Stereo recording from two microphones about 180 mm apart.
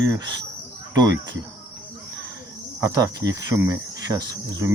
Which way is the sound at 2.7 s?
20° right (ahead or behind).